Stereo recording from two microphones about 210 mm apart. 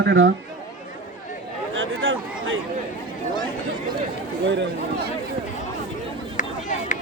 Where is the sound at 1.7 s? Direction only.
70° right (ahead or behind).